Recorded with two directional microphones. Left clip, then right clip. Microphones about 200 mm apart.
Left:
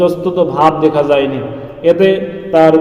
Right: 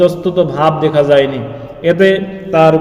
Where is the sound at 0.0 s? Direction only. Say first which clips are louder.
Right 1 dB; 35° right (ahead or behind).